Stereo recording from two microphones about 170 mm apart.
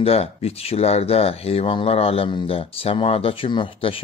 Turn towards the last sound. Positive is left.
turn(degrees=30)  # may be behind; listen again after turning